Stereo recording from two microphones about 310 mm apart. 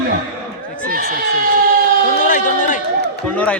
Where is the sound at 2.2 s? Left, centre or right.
Left.